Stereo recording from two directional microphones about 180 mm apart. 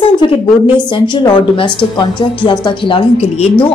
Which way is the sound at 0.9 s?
25° left (ahead or behind).